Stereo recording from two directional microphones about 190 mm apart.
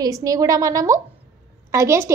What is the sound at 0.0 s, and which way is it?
A woman's voice, 15° right (ahead or behind).